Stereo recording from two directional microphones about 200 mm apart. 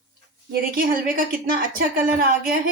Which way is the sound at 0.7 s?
45° right (ahead or behind).